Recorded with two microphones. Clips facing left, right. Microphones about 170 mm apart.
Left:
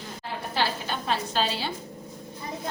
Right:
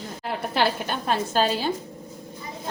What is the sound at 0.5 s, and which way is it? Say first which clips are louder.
A woman's voice: right 4 dB; 55° right (ahead or behind).